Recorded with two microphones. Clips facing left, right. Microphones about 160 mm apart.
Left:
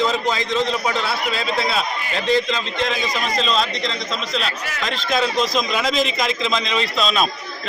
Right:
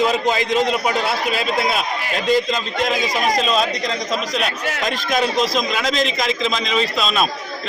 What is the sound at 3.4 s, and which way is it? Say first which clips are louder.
Speech: right 2 dB; 10° right (ahead or behind).